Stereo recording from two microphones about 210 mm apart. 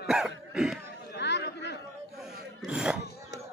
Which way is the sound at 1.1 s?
55° left (ahead or behind).